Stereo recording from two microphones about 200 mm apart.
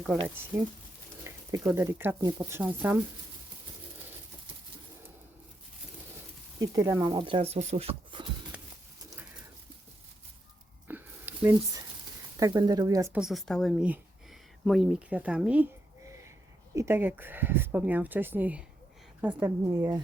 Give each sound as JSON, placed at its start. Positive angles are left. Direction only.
{"t": 0.5, "sound": "speech", "side_deg": -10}
{"t": 6.6, "sound": "speech", "side_deg": -15}
{"t": 7.1, "sound": "speech", "side_deg": -25}
{"t": 8.5, "sound": "a sound", "side_deg": -5}
{"t": 10.8, "sound": "a sound", "side_deg": -10}
{"t": 12.4, "sound": "speech", "side_deg": -20}
{"t": 13.1, "sound": "speech", "side_deg": 0}
{"t": 16.7, "sound": "speech", "side_deg": -10}